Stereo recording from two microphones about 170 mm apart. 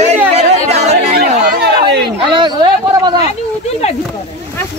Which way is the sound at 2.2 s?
25° right (ahead or behind).